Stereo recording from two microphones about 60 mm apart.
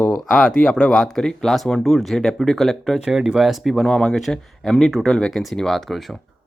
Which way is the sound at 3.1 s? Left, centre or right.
Centre.